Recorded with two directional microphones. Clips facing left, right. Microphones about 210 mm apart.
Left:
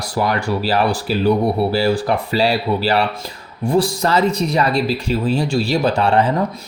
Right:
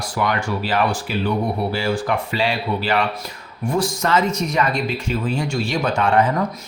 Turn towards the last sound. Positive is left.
turn(degrees=35)  # may be behind; listen again after turning